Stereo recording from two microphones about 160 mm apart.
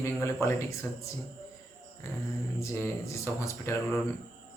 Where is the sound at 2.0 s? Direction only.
15° left (ahead or behind).